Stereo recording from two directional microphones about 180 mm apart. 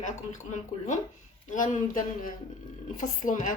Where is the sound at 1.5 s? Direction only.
45° left (ahead or behind).